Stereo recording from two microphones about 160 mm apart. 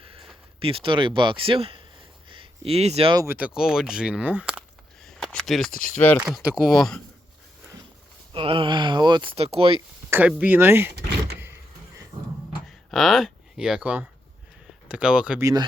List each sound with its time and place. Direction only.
0.0 s a sound: 35° right (ahead or behind)
0.6 s speech: 35° right (ahead or behind)
3.2 s speech: 10° right (ahead or behind)
5.0 s a sound: 5° left (ahead or behind)
5.7 s speech: 60° left (ahead or behind)
6.1 s speech: 5° right (ahead or behind)
8.3 s speech: 35° right (ahead or behind)
10.1 s speech: 10° right (ahead or behind)
12.6 s a sound: centre (ahead or behind)
14.8 s speech: 5° right (ahead or behind)
15.4 s speech: 20° right (ahead or behind)